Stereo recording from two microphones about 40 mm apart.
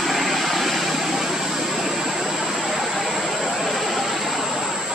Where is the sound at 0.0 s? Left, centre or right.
Centre.